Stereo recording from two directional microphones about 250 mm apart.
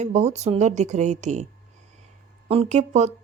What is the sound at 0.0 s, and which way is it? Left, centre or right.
A woman's voice, right.